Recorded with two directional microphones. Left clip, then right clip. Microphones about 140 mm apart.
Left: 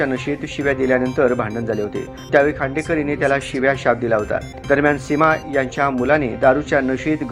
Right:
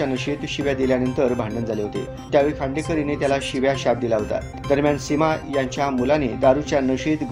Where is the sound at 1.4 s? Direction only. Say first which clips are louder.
Left 3 dB; centre (ahead or behind).